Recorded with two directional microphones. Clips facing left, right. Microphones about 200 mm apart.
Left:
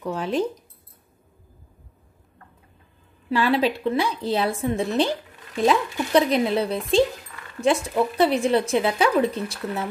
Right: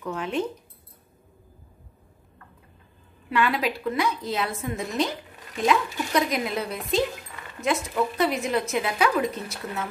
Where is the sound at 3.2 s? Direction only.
30° left (ahead or behind).